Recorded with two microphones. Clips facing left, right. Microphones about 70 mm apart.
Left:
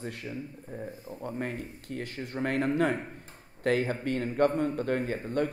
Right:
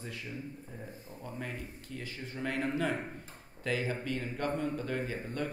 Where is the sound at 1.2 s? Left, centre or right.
Left.